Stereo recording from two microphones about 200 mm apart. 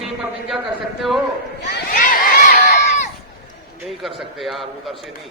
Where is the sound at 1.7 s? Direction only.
45° left (ahead or behind).